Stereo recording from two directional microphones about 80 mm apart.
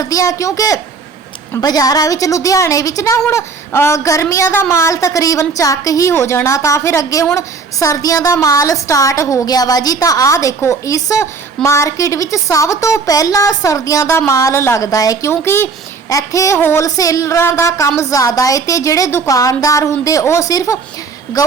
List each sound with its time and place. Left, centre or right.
0.0 s a woman's voice: left
15.3 s a woman's voice: left
16.0 s a woman's voice: left
16.6 s child singing: left
16.8 s a woman's voice: left
20.5 s a woman's voice: left